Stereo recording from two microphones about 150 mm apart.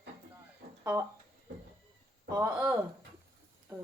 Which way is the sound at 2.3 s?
10° right (ahead or behind).